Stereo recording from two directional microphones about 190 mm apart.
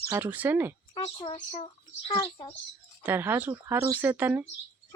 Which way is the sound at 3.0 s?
10° right (ahead or behind).